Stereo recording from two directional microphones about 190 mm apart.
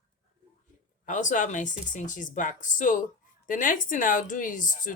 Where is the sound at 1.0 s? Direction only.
40° left (ahead or behind).